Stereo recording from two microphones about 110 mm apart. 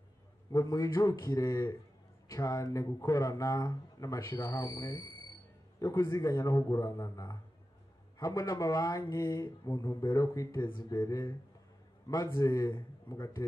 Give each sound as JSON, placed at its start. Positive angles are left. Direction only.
{"t": 0.5, "sound": "speech", "side_deg": 30}